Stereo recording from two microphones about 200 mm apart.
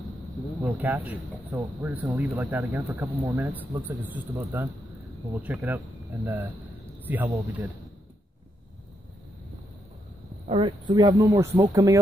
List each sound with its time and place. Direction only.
0.6 s speech: 10° right (ahead or behind)
10.4 s speech: 25° right (ahead or behind)